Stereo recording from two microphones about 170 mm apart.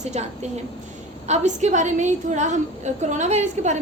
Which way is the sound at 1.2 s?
40° right (ahead or behind).